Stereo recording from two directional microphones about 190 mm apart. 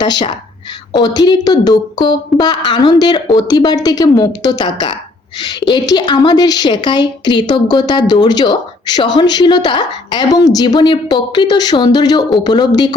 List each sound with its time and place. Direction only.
0.0 s a woman's voice: 25° left (ahead or behind)